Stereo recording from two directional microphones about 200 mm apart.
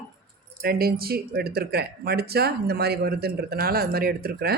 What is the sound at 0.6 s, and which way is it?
Speech, 50° right (ahead or behind).